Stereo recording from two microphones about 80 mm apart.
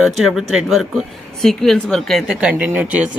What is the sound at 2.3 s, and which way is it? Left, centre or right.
Speech, centre.